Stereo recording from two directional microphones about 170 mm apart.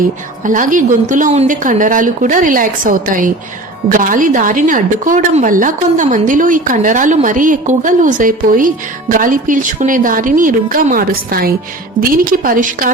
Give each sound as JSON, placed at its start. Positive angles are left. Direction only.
{"t": 0.4, "sound": "a woman's voice", "side_deg": -50}